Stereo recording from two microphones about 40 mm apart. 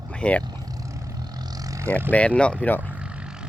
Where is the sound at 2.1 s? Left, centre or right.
Left.